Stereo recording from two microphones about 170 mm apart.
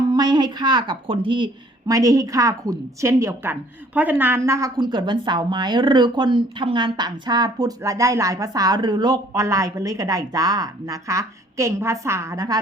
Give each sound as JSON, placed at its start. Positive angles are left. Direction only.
{"t": 0.1, "sound": "a woman's voice", "side_deg": -25}